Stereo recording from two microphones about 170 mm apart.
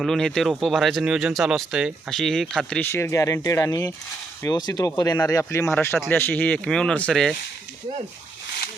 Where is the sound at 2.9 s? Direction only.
15° left (ahead or behind).